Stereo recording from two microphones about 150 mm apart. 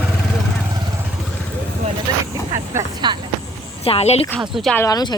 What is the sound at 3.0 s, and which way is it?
Speech, 30° right (ahead or behind).